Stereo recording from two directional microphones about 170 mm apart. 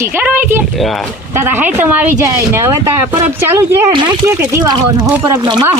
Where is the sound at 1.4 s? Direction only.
10° right (ahead or behind).